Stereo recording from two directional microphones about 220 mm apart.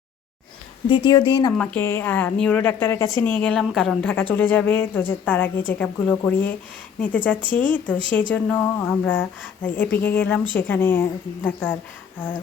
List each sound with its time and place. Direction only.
0.9 s speech: 20° left (ahead or behind)
1.5 s a woman's voice: 10° left (ahead or behind)
7.5 s a woman's voice: 5° left (ahead or behind)